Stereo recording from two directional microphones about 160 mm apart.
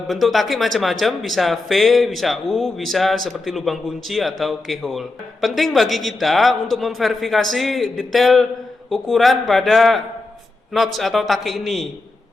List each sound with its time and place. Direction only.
0.1 s speech: centre (ahead or behind)